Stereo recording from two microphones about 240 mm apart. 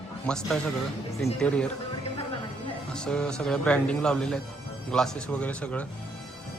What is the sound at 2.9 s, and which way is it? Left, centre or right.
Speech, centre.